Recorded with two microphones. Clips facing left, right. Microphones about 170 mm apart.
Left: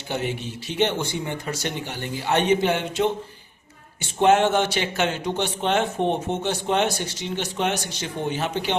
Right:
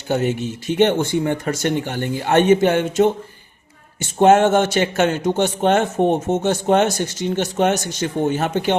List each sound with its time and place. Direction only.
0.1 s a man's voice: 45° right (ahead or behind)